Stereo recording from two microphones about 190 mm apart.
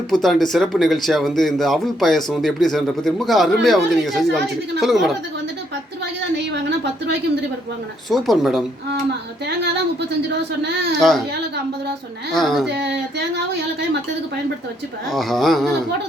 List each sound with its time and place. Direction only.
0.1 s speech: centre (ahead or behind)
8.1 s speech: centre (ahead or behind)
10.2 s speech: 60° right (ahead or behind)
12.3 s speech: centre (ahead or behind)
12.6 s speech: 65° right (ahead or behind)
15.1 s speech: centre (ahead or behind)